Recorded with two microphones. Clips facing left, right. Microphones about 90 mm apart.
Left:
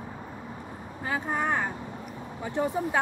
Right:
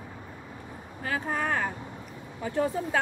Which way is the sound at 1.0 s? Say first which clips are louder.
Left 1 dB; 20° left (ahead or behind).